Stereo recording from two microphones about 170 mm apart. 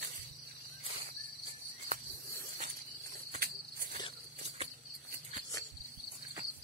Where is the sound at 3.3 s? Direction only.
65° right (ahead or behind).